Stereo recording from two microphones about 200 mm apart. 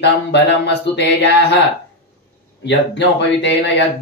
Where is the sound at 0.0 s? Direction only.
60° left (ahead or behind).